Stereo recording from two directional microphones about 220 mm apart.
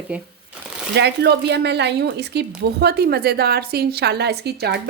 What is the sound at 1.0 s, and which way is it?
A woman's voice, 50° right (ahead or behind).